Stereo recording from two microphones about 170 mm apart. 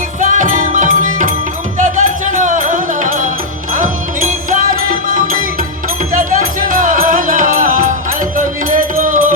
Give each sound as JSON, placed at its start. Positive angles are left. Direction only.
{"t": 0.2, "sound": "music", "side_deg": -50}